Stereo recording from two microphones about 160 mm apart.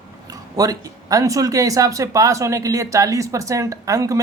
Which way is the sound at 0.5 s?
20° right (ahead or behind).